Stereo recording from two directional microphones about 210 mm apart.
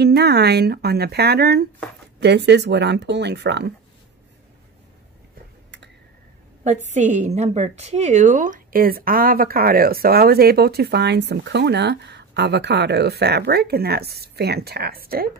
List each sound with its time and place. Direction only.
0.0 s a woman's voice: 50° right (ahead or behind)
6.9 s a woman's voice: 35° right (ahead or behind)